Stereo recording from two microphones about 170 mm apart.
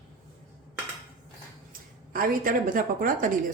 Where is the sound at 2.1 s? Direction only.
55° right (ahead or behind).